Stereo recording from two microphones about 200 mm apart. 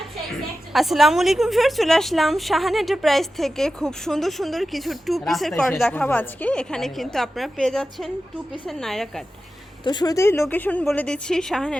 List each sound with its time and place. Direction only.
0.7 s a woman's voice: centre (ahead or behind)
9.8 s a woman's voice: 20° left (ahead or behind); by 11.8 s 5° left (ahead or behind)